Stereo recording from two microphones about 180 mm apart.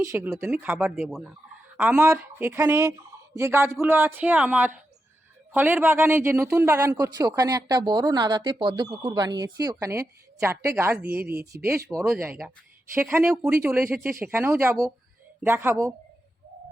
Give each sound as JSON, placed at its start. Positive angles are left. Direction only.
{"t": 0.0, "sound": "a woman's voice", "side_deg": -15}
{"t": 12.9, "sound": "a woman's voice", "side_deg": -10}